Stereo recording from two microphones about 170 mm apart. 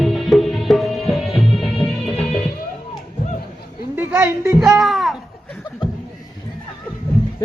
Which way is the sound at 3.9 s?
10° right (ahead or behind).